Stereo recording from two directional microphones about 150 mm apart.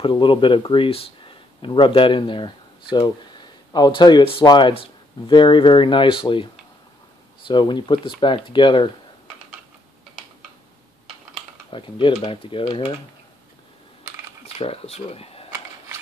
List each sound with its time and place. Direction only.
0.0 s speech: 35° left (ahead or behind)
11.7 s speech: 35° left (ahead or behind)
14.4 s speech: 40° left (ahead or behind)